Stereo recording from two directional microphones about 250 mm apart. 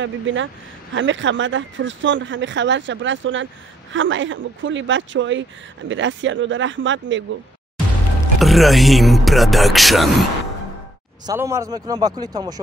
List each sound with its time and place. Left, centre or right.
0.0 s speech: right
8.4 s speech: centre
11.2 s speech: centre